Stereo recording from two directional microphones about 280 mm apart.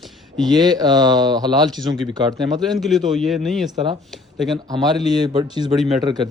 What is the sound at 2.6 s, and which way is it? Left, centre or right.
Speech, centre.